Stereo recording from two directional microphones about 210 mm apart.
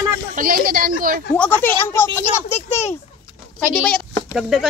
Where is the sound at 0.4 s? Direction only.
40° right (ahead or behind).